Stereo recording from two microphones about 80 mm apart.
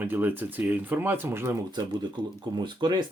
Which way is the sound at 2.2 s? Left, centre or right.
Right.